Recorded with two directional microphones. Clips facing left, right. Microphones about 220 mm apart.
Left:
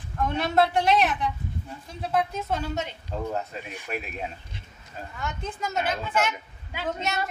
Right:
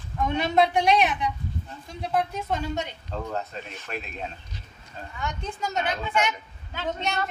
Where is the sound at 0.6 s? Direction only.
15° right (ahead or behind).